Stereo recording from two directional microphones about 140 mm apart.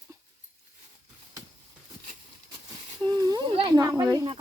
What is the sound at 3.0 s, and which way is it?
Speech, 25° right (ahead or behind).